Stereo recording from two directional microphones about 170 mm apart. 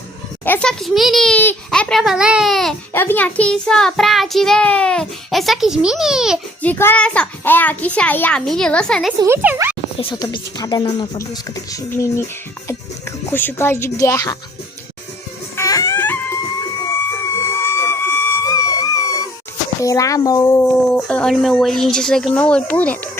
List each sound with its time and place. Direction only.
0.4 s a child's voice: 10° left (ahead or behind)
6.6 s a child's voice: 10° left (ahead or behind)
9.2 s speech: 10° right (ahead or behind)
10.0 s a child's voice: 30° left (ahead or behind)
15.5 s music: 20° left (ahead or behind)
17.3 s a sound: 15° left (ahead or behind)
19.8 s speech: 20° left (ahead or behind)
20.9 s a child's voice: 5° left (ahead or behind)